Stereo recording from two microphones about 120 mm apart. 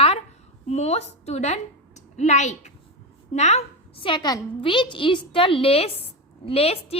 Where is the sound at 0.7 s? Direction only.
65° left (ahead or behind).